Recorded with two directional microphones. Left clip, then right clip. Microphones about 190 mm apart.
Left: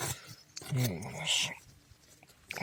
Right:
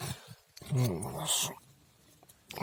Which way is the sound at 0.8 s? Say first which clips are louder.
Right 2 dB; 20° right (ahead or behind).